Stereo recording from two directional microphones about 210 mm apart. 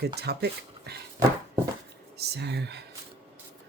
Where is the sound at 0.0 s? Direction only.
50° right (ahead or behind).